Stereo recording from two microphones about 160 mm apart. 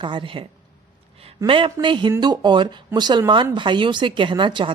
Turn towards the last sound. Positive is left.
turn(degrees=-30)  # may be behind; listen again after turning